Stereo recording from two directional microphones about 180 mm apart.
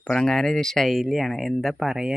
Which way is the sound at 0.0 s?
5° left (ahead or behind).